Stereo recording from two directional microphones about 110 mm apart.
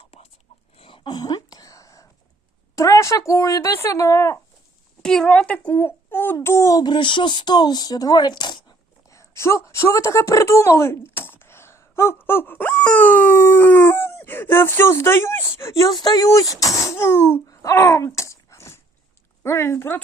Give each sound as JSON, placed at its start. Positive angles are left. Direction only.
{"t": 0.8, "sound": "whispering", "side_deg": 50}
{"t": 2.7, "sound": "speech", "side_deg": 30}
{"t": 5.0, "sound": "a woman's voice", "side_deg": 5}
{"t": 5.7, "sound": "a sound", "side_deg": 20}
{"t": 6.4, "sound": "speech", "side_deg": 25}
{"t": 6.8, "sound": "speech", "side_deg": 45}
{"t": 9.1, "sound": "a woman's voice", "side_deg": 25}
{"t": 15.9, "sound": "speech", "side_deg": 40}